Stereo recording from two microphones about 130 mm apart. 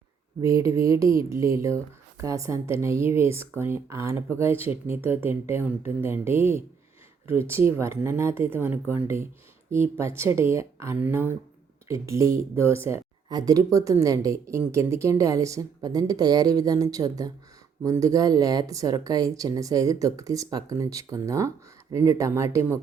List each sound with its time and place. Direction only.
0.4 s a woman's voice: 25° right (ahead or behind)
13.2 s a woman's voice: 30° right (ahead or behind)